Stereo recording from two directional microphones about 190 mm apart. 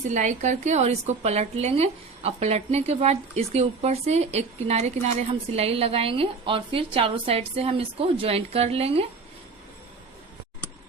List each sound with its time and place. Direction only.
0.1 s a woman's voice: 40° right (ahead or behind)